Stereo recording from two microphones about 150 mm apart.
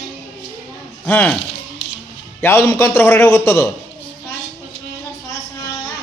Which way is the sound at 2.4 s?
20° left (ahead or behind).